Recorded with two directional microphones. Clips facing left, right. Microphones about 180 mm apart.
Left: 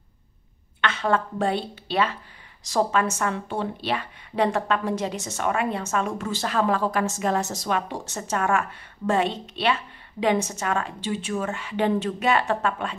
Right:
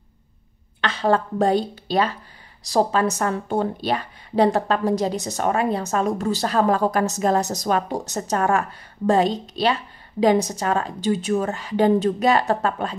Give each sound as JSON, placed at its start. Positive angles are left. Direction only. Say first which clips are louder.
{"t": 0.7, "sound": "a woman's voice", "louder": "right 3 dB", "side_deg": -35}